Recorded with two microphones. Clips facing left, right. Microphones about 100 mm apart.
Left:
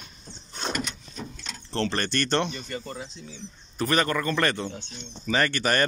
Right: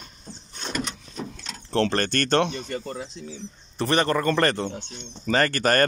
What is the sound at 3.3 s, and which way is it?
Speech, 30° right (ahead or behind).